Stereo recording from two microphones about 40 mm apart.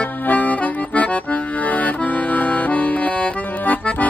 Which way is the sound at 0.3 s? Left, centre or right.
Left.